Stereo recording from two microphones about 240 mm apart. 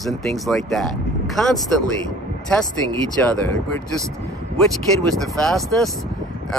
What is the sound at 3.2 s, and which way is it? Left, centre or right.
Speech, centre.